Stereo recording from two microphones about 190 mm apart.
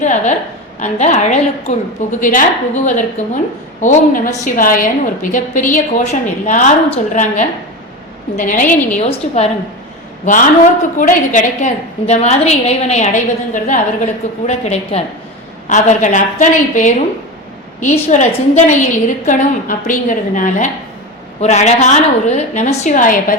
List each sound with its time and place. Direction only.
0.0 s a woman's voice: 40° left (ahead or behind)